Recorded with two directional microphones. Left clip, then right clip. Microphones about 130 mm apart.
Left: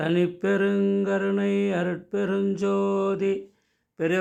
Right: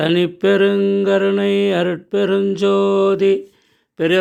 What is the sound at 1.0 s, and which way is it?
Speech, 30° right (ahead or behind).